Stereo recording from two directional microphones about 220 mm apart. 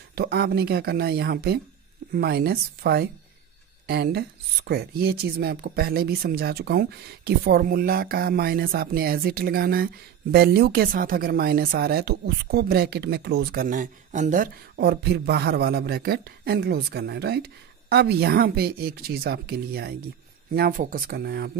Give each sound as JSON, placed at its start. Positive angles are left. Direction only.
{"t": 0.1, "sound": "speech", "side_deg": -45}